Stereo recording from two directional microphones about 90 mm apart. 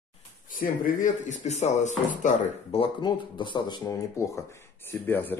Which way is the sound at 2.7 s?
90° left.